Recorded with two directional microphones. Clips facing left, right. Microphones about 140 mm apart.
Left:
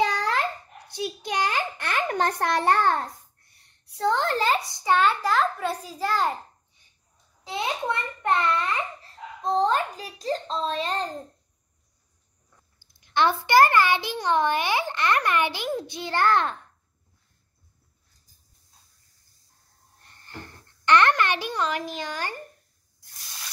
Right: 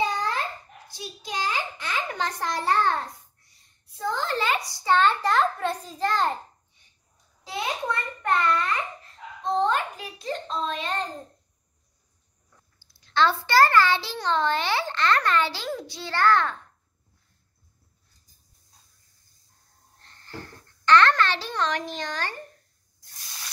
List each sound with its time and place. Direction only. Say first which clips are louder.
0.0 s a sound: left 2 dB; 90° left; by 4.4 s 65° left (ahead or behind)
4.6 s a child's voice: even; 20° left (ahead or behind)
7.4 s a child's voice: left 1 dB; 25° left (ahead or behind)
9.4 s a child's voice: left 1 dB; 35° left (ahead or behind)
12.9 s a child's voice: even; 15° left (ahead or behind)
20.0 s a sound: right 2 dB; 15° left (ahead or behind)